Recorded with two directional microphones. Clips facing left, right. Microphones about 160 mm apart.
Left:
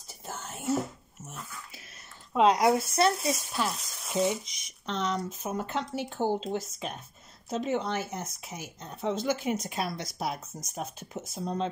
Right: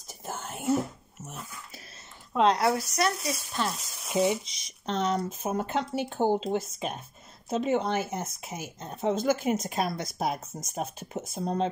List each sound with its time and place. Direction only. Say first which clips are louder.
0.3 s whispering: right 3 dB; 55° right (ahead or behind)
2.3 s speech: left 1 dB; 10° left (ahead or behind); by 3.4 s 25° left (ahead or behind)
3.5 s speech: even; centre (ahead or behind)
4.1 s speech: right 2 dB; 15° right (ahead or behind)
4.8 s speech: right 3 dB; 50° right (ahead or behind)